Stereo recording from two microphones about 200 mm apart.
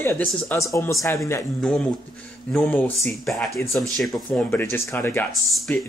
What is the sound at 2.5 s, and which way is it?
Speech, 10° left (ahead or behind).